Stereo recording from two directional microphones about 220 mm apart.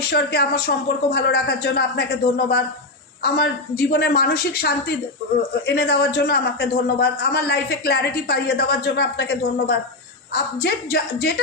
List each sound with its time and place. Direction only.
0.0 s a man's voice: 45° left (ahead or behind)